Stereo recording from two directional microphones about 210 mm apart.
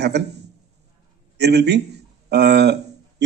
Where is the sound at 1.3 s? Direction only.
50° right (ahead or behind).